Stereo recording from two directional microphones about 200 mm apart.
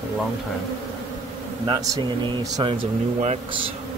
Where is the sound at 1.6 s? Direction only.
25° right (ahead or behind).